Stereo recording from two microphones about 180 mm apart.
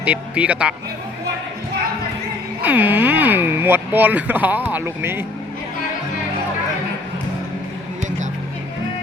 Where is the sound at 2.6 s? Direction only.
10° right (ahead or behind).